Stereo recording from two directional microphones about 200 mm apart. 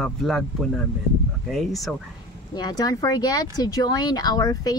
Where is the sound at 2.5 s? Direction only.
20° left (ahead or behind).